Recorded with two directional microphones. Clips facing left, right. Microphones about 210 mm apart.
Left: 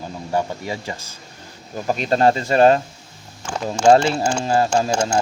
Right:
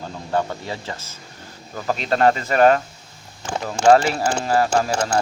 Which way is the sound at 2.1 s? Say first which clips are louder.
Left 1 dB; 30° left (ahead or behind).